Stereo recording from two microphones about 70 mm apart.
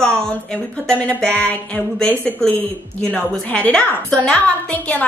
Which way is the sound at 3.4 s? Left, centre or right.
Centre.